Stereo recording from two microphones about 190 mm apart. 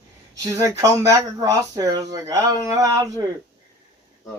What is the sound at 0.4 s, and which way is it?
Speech, 15° right (ahead or behind).